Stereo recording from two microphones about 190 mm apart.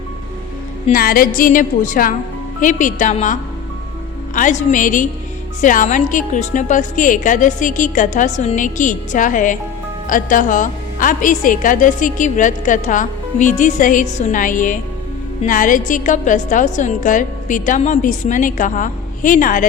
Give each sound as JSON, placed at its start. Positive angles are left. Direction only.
{"t": 0.9, "sound": "a woman's voice", "side_deg": 50}
{"t": 4.4, "sound": "a woman's voice", "side_deg": 40}